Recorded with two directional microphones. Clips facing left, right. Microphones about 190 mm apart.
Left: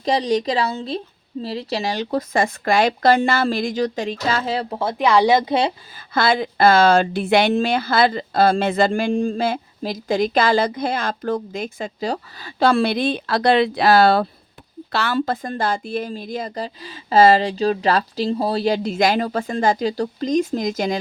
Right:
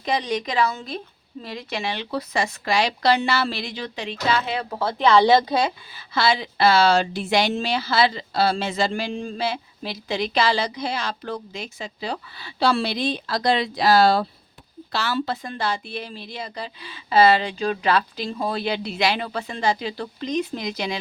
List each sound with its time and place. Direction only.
0.0 s a woman's voice: 35° left (ahead or behind)
4.7 s speech: 20° left (ahead or behind)
6.1 s a woman's voice: 50° left (ahead or behind)